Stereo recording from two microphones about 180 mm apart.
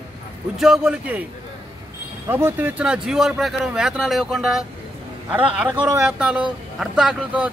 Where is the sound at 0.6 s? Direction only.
5° right (ahead or behind).